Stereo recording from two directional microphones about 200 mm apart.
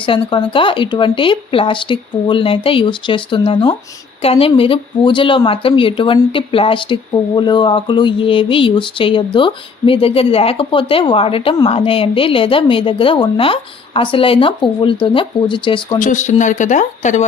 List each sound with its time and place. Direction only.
0.0 s a woman's voice: 25° left (ahead or behind)
16.0 s speech: 40° left (ahead or behind)